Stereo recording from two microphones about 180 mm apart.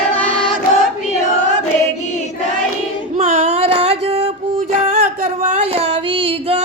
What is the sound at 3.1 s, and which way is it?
Female singing, 45° right (ahead or behind).